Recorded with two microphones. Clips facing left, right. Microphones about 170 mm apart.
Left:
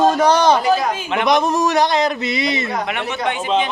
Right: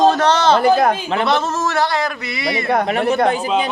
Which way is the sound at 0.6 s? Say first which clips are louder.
Right 4 dB; 55° right (ahead or behind).